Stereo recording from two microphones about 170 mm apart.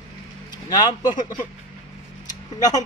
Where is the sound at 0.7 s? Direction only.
25° left (ahead or behind).